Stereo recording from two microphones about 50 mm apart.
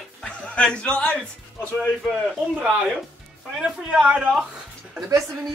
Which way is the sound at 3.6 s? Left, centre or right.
Right.